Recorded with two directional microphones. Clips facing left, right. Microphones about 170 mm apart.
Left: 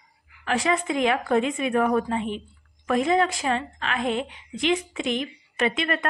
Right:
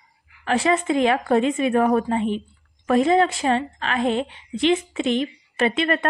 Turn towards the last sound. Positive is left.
turn(degrees=-30)  # may be behind; listen again after turning